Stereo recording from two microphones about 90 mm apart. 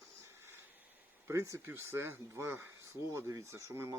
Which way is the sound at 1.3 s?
35° right (ahead or behind).